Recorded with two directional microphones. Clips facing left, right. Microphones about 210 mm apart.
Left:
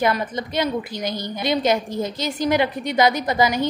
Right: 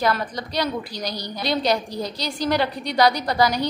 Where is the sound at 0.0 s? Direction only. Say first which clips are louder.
Left 2 dB; 20° left (ahead or behind).